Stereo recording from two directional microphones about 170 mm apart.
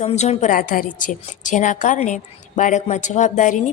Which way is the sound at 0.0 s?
40° left (ahead or behind).